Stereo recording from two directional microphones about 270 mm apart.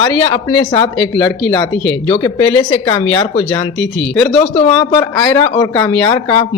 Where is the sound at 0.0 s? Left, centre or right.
Centre.